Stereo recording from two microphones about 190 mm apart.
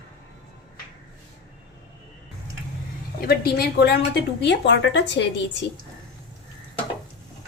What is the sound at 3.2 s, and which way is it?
A woman's voice, 55° left (ahead or behind).